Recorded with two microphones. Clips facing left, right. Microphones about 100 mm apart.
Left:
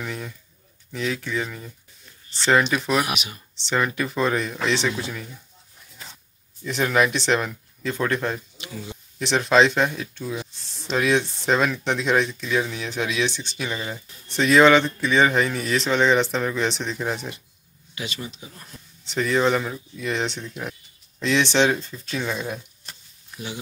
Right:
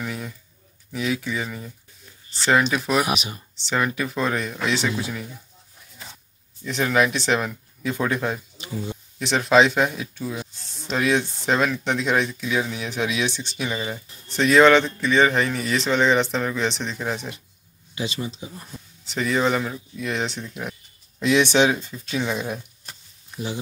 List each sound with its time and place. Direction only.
0.0 s speech: 5° right (ahead or behind)
6.6 s speech: centre (ahead or behind)
17.9 s speech: 30° right (ahead or behind)
18.5 s speech: 15° right (ahead or behind)
19.0 s speech: centre (ahead or behind)